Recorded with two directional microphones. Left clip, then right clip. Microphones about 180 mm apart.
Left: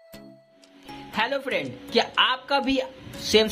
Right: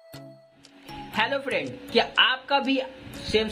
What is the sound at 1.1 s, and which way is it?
A woman's voice, 10° left (ahead or behind).